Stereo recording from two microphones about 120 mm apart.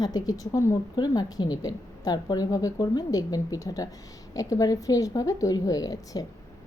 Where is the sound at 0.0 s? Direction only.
30° left (ahead or behind).